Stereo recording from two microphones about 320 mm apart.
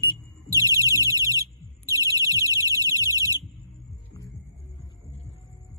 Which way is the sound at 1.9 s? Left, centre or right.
Centre.